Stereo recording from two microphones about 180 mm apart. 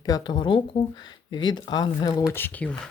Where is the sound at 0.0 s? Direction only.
25° left (ahead or behind).